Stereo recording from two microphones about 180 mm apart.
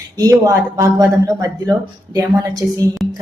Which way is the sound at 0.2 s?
20° right (ahead or behind).